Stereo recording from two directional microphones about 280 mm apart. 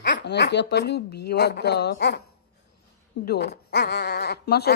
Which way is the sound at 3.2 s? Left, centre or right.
Left.